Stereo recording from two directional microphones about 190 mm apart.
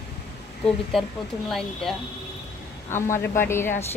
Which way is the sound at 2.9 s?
15° left (ahead or behind).